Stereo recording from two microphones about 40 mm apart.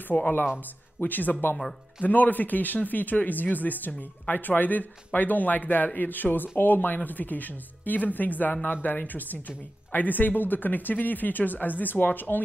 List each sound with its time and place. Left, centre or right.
0.1 s speech: left
1.0 s speech: left